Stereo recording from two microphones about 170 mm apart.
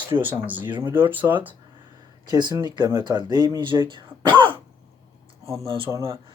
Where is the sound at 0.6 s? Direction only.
30° right (ahead or behind).